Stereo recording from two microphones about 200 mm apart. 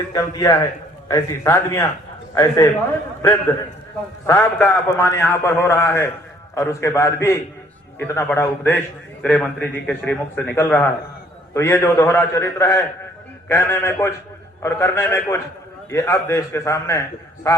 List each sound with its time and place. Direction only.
0.1 s a man's voice: 20° left (ahead or behind)
4.3 s a man's voice: 10° left (ahead or behind)